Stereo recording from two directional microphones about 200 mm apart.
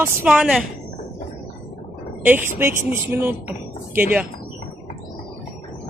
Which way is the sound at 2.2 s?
10° right (ahead or behind).